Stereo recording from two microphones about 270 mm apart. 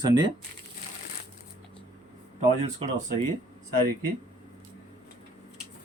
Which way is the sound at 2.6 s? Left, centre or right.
Right.